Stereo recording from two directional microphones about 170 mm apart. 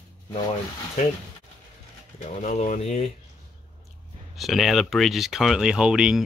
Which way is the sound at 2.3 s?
45° left (ahead or behind).